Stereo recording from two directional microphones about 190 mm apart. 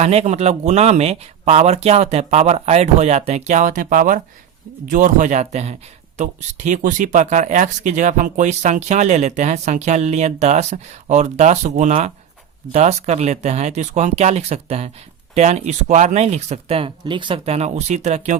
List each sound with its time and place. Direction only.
0.0 s speech: 35° right (ahead or behind)